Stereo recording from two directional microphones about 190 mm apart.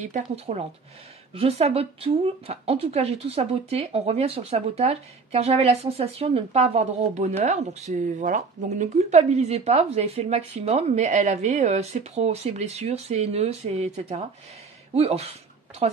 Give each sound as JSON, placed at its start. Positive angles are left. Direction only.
{"t": 0.0, "sound": "a woman's voice", "side_deg": -35}